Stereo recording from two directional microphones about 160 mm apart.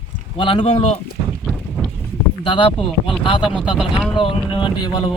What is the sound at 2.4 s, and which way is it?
Speech, 30° left (ahead or behind).